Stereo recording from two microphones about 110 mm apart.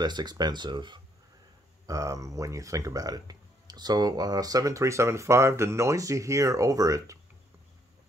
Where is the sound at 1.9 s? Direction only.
30° right (ahead or behind).